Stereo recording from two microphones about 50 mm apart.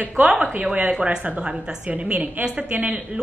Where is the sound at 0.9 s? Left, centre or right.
Centre.